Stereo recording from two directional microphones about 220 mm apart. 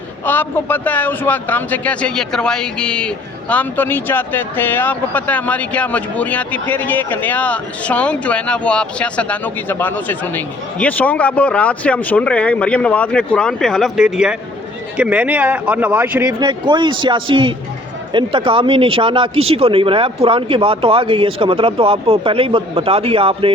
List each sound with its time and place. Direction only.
0.3 s speech: 10° left (ahead or behind); by 16.3 s 10° right (ahead or behind)
16.4 s speech: 20° right (ahead or behind)